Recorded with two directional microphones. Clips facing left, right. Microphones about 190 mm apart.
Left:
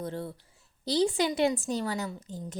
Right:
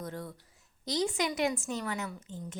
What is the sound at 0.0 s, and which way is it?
A woman's voice, 30° left (ahead or behind).